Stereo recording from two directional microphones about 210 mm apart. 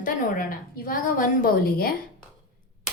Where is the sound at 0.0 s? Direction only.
40° left (ahead or behind).